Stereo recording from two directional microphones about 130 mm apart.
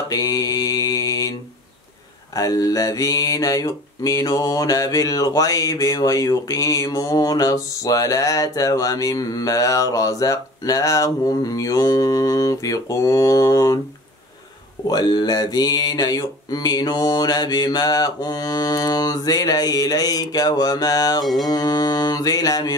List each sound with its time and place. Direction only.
0.1 s mantra: 30° left (ahead or behind)
2.3 s mantra: 30° left (ahead or behind)
14.9 s mantra: 30° left (ahead or behind)
21.2 s mantra: centre (ahead or behind)
21.5 s mantra: 30° left (ahead or behind)